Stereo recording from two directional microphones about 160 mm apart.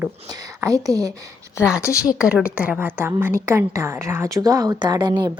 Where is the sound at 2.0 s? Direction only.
5° right (ahead or behind).